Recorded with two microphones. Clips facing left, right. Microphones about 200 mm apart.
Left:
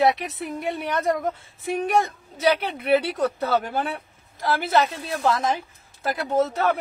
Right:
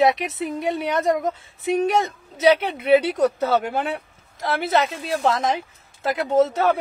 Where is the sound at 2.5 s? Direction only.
20° right (ahead or behind).